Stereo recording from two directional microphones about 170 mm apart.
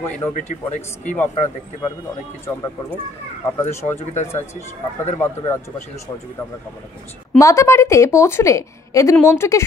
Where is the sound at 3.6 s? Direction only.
15° left (ahead or behind).